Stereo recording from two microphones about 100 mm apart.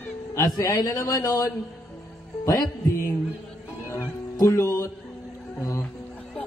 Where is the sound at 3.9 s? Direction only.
35° left (ahead or behind).